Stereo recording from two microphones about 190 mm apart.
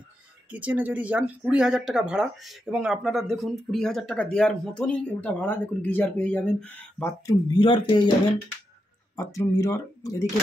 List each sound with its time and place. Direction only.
0.5 s speech: 10° right (ahead or behind); by 7.3 s 10° left (ahead or behind)
7.5 s speech: 25° left (ahead or behind)
9.1 s speech: 15° left (ahead or behind)